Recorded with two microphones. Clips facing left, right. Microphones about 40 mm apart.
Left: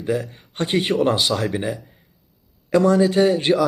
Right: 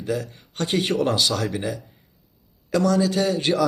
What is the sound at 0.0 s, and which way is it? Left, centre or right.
Speech, centre.